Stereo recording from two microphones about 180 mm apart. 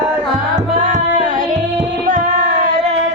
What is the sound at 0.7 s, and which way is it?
Tabla, 45° right (ahead or behind).